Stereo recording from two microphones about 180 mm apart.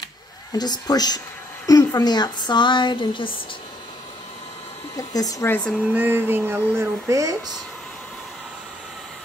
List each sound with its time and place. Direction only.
0.5 s a woman's voice: 20° left (ahead or behind)
4.9 s speech: 20° left (ahead or behind)
5.9 s speech: 10° right (ahead or behind)